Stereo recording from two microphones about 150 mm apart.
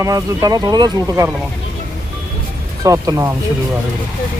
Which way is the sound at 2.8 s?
20° right (ahead or behind).